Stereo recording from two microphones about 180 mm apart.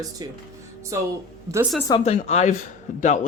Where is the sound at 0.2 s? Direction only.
20° right (ahead or behind).